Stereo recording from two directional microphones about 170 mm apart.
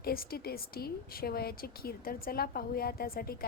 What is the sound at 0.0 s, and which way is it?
A woman's voice, 60° left (ahead or behind).